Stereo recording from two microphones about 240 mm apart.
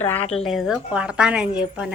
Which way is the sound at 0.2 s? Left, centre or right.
Left.